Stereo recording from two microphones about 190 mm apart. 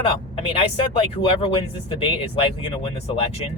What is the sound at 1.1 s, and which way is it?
Speech, 30° left (ahead or behind).